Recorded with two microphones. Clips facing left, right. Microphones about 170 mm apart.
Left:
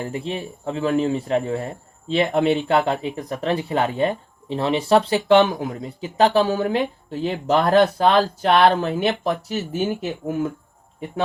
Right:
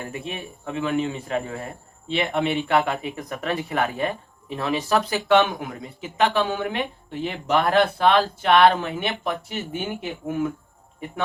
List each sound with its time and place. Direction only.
0.0 s speech: 30° left (ahead or behind)